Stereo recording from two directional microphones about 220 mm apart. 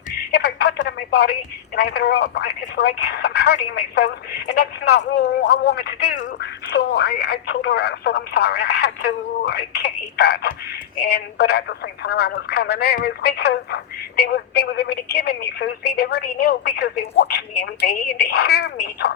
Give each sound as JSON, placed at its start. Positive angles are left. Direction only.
{"t": 0.2, "sound": "speech", "side_deg": 45}